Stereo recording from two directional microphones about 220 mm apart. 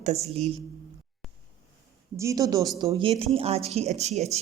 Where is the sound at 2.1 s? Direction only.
15° right (ahead or behind); by 4.3 s 30° right (ahead or behind).